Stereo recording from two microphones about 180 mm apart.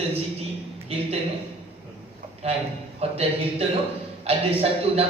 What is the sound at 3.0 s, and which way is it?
Speech, 35° right (ahead or behind).